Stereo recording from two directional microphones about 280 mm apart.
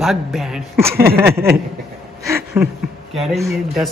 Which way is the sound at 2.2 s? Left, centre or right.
Centre.